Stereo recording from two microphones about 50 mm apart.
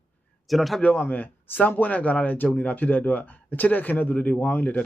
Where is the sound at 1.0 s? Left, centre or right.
Left.